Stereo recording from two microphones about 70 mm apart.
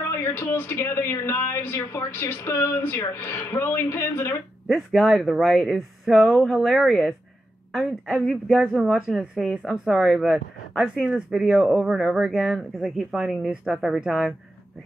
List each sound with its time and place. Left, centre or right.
0.1 s speech: left
4.6 s speech: centre
8.2 s speech: centre
10.8 s speech: centre
11.4 s speech: centre
12.5 s speech: centre